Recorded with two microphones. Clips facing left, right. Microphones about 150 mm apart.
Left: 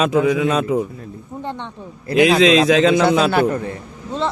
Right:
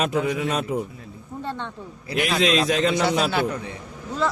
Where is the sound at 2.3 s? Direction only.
90° left.